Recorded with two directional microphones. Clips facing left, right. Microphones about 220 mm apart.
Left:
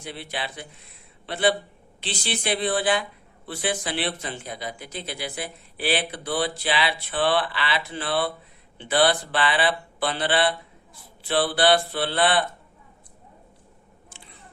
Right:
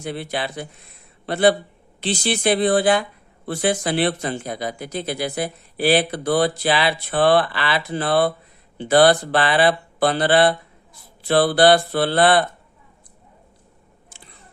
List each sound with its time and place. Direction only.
0.0 s speech: 45° right (ahead or behind)